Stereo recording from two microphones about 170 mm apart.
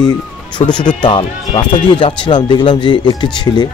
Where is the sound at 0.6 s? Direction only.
40° left (ahead or behind).